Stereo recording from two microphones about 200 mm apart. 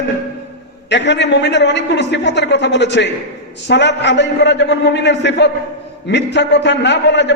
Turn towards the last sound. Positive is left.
turn(degrees=60)  # may be behind; listen again after turning